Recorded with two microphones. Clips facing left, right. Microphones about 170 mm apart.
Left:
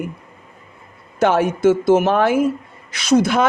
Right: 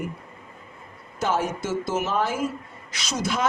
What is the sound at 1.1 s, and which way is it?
A man's voice, 65° left (ahead or behind).